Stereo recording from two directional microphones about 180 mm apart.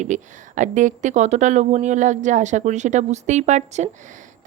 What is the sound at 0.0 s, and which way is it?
A woman's voice, 40° right (ahead or behind).